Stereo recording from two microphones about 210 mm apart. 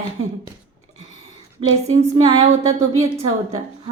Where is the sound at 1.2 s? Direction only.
30° right (ahead or behind).